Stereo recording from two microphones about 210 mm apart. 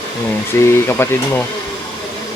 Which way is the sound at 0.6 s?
10° left (ahead or behind).